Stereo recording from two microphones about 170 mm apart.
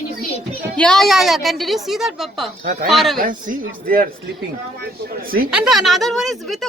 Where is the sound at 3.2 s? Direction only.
55° right (ahead or behind).